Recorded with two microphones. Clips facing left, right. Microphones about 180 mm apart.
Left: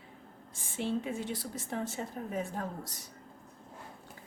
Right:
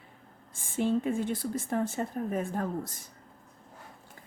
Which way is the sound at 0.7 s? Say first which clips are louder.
Right 6 dB; 50° right (ahead or behind).